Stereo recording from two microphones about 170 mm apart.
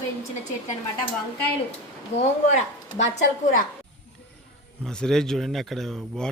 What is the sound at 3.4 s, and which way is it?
Speech, 55° left (ahead or behind).